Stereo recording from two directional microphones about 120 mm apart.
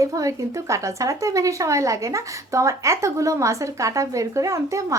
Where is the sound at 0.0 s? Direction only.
30° right (ahead or behind).